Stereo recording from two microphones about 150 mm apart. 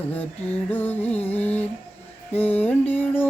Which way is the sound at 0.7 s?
10° left (ahead or behind).